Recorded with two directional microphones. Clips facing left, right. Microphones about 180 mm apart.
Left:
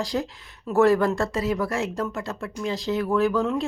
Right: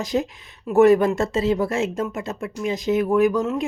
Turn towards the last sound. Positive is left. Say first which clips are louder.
# right 3 dB
turn(degrees=-15)  # may be behind; listen again after turning